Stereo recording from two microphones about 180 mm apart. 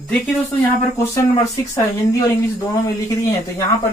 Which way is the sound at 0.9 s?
20° left (ahead or behind).